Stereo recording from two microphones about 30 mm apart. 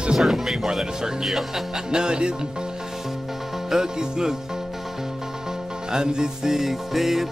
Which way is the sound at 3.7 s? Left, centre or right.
Right.